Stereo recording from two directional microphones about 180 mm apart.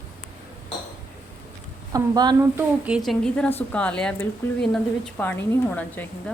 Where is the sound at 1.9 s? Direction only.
20° right (ahead or behind).